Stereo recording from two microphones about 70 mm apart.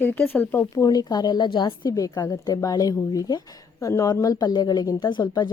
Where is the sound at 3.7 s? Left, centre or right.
Left.